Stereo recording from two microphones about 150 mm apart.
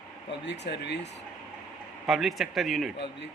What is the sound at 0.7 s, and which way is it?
Speech, 90° left.